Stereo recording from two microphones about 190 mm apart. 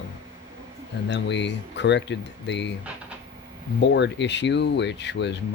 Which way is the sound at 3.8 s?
65° left (ahead or behind).